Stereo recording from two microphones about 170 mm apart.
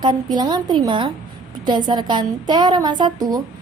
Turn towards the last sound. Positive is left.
turn(degrees=-25)  # may be behind; listen again after turning